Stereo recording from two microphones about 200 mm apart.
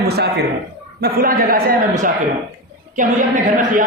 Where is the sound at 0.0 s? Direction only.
55° right (ahead or behind).